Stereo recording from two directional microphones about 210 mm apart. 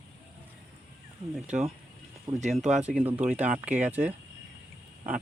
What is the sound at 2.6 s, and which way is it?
Speech, 35° right (ahead or behind).